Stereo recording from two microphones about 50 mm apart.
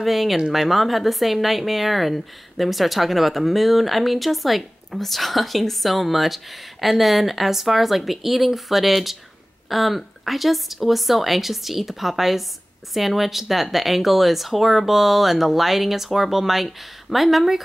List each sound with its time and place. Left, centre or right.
0.0 s speech: centre